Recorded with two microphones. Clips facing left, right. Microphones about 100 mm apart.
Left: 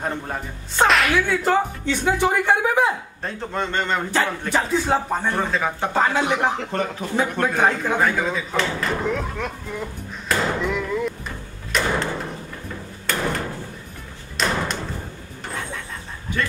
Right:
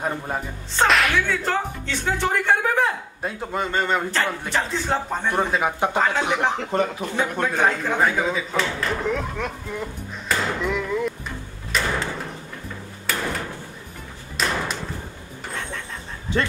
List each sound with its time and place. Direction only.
0.7 s speech: centre (ahead or behind)
3.2 s a man's voice: 10° right (ahead or behind)
4.1 s speech: 10° left (ahead or behind)
5.3 s a man's voice: 15° right (ahead or behind)
6.1 s speech: centre (ahead or behind)
11.7 s a sound: centre (ahead or behind)
13.1 s door: 5° right (ahead or behind)
14.3 s thump: 5° right (ahead or behind)